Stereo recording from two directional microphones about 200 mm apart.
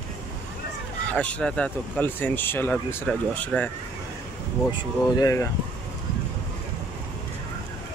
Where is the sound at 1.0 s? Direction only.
5° left (ahead or behind).